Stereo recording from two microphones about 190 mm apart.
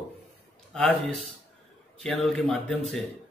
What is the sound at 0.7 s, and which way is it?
Speech, 5° left (ahead or behind).